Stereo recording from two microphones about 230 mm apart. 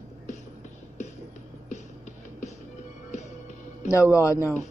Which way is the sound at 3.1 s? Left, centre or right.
Left.